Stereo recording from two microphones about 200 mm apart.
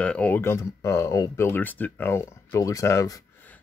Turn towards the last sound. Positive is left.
turn(degrees=10)  # may be behind; listen again after turning